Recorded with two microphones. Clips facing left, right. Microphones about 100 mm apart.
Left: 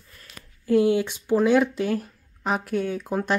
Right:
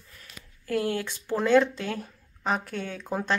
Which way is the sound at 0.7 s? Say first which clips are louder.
Left 8 dB; 15° left (ahead or behind).